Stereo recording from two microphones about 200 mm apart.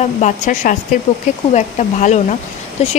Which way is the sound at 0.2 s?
35° left (ahead or behind).